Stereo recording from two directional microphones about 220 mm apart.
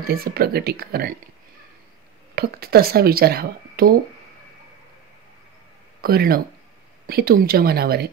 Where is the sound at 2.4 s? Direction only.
45° right (ahead or behind).